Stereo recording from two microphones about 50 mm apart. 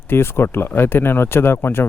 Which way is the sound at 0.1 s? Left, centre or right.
Left.